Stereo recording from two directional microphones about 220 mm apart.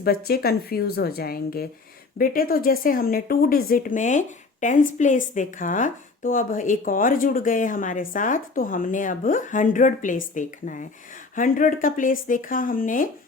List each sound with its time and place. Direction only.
0.3 s a woman's voice: 45° left (ahead or behind)